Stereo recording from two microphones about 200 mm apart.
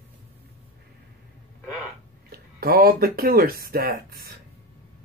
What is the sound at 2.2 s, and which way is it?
Speech, 50° right (ahead or behind).